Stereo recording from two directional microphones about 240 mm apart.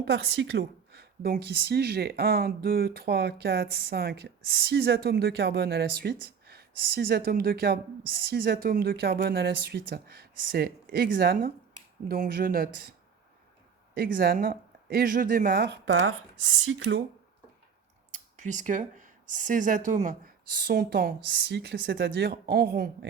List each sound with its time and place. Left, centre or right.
0.0 s speech: right
13.9 s speech: right
18.1 s speech: right